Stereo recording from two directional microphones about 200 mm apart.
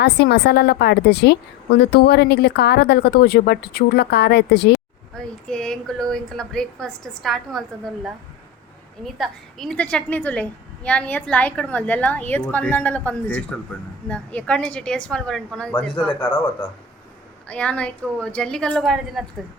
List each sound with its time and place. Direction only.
0.0 s speech: 55° left (ahead or behind)
5.1 s a woman's voice: 5° left (ahead or behind)
9.0 s a woman's voice: centre (ahead or behind)